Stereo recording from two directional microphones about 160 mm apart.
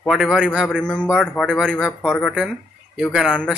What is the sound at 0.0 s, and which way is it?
Speech, centre (ahead or behind).